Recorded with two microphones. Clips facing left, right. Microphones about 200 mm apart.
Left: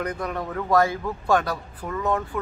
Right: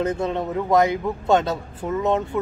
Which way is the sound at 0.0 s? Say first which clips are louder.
Right 5 dB; 25° right (ahead or behind).